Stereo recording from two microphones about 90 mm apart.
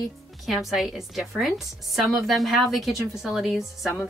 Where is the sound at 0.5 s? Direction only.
Centre (ahead or behind).